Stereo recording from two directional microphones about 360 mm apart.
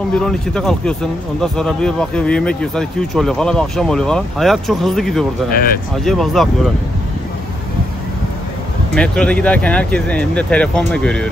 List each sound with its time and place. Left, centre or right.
0.2 s speech: centre
5.5 s speech: left
6.0 s speech: centre
8.9 s speech: centre